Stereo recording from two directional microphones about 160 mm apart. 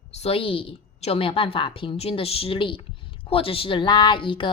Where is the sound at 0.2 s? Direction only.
35° left (ahead or behind).